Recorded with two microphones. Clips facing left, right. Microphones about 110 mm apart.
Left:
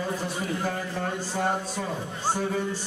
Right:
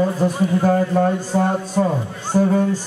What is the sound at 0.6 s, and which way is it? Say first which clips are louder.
Speech: right 13 dB; 50° right (ahead or behind).